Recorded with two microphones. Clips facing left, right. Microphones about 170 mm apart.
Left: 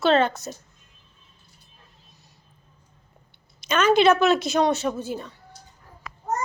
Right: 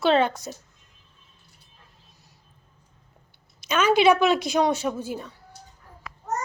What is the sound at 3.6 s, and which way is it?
A woman's voice, 10° right (ahead or behind).